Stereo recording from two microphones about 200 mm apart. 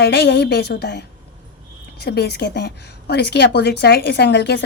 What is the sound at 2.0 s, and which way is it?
A woman's voice, 55° left (ahead or behind).